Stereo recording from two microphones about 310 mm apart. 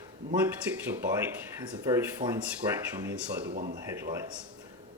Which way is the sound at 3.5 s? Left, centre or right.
Right.